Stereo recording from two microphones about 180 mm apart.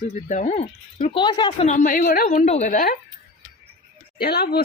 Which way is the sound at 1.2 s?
25° left (ahead or behind).